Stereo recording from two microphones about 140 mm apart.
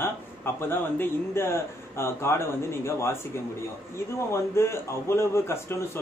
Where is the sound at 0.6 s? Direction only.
15° left (ahead or behind).